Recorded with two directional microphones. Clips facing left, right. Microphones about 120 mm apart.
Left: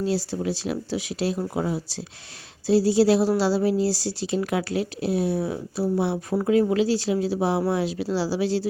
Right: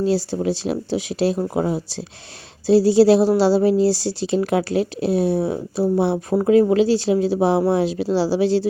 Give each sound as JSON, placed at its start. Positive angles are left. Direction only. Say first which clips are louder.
{"t": 0.0, "sound": "a woman's voice", "louder": "right 5 dB", "side_deg": -25}